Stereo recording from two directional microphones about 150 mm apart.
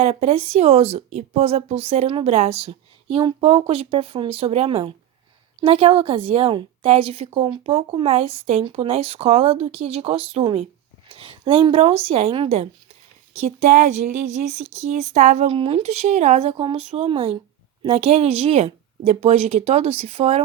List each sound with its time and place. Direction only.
0.0 s a woman's voice: 45° right (ahead or behind)